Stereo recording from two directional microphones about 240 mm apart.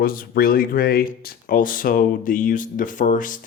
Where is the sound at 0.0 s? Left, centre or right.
Left.